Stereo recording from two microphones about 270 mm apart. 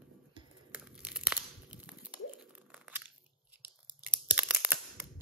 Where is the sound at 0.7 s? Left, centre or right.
Centre.